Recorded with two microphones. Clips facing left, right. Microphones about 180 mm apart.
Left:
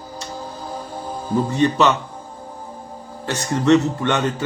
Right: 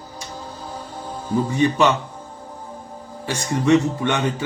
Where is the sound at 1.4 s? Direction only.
10° right (ahead or behind).